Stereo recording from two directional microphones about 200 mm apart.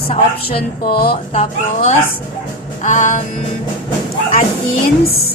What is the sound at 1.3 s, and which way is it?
Music, 35° left (ahead or behind).